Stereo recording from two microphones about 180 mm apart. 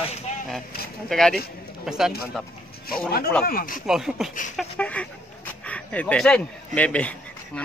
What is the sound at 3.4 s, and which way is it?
Speech, 55° left (ahead or behind).